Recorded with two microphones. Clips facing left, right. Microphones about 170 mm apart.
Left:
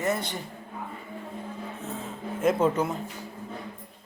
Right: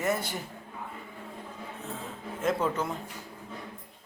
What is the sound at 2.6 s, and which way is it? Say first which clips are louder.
Speech: left 6 dB; 20° left (ahead or behind).